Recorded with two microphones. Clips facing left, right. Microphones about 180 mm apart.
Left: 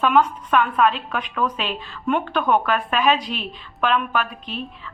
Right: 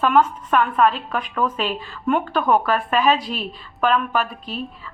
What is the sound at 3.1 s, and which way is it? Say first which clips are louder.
A woman's voice: right 1 dB; 40° right (ahead or behind).